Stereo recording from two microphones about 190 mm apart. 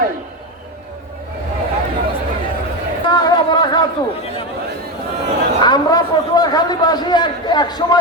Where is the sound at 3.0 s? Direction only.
20° left (ahead or behind).